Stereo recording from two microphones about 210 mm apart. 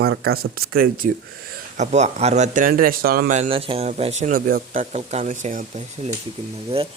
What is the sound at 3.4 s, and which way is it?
A man's voice, 25° right (ahead or behind).